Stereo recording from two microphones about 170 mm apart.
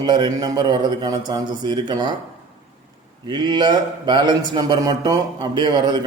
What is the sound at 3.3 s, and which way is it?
A man's voice, 25° right (ahead or behind).